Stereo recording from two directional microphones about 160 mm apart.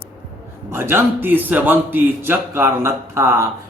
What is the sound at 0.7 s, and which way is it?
A man's voice, 15° right (ahead or behind).